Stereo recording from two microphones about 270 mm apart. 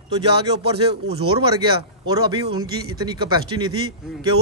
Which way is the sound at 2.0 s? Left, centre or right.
Centre.